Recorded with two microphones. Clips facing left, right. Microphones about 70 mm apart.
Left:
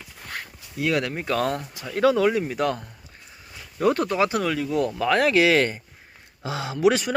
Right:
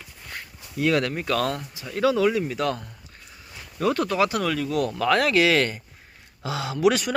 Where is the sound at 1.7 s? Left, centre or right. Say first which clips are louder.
Left 3 dB; left.